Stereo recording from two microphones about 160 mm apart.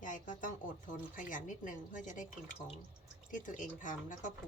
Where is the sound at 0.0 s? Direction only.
55° left (ahead or behind).